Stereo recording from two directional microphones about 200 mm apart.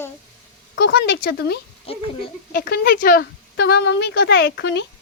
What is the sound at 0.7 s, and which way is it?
Speech, 55° left (ahead or behind).